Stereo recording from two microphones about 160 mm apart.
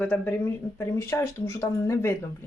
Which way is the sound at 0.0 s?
10° left (ahead or behind).